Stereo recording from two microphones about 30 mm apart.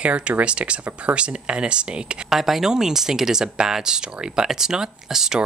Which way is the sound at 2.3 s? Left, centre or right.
Centre.